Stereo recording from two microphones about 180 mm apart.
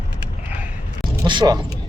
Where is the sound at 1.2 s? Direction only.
25° right (ahead or behind).